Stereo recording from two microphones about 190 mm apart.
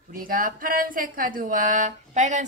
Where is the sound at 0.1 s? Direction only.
50° right (ahead or behind).